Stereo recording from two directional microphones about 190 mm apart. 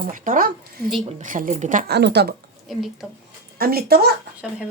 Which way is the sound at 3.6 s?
55° right (ahead or behind).